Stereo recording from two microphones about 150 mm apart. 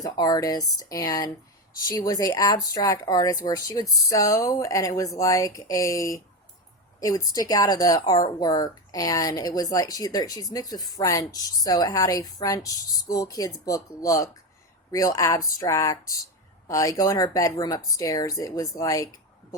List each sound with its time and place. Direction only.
0.0 s speech: 25° left (ahead or behind)